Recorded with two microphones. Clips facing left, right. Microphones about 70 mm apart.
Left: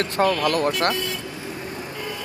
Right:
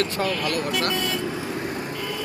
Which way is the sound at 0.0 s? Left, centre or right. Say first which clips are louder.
Left 4 dB; left.